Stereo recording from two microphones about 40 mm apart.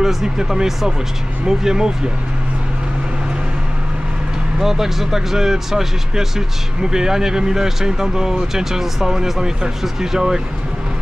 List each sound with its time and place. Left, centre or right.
0.0 s speech: centre
4.6 s speech: centre